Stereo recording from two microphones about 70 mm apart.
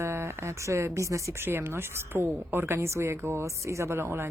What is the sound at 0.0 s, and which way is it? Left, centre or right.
Speech, right.